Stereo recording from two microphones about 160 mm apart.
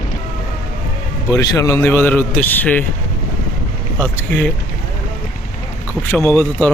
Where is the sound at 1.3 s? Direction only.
20° left (ahead or behind).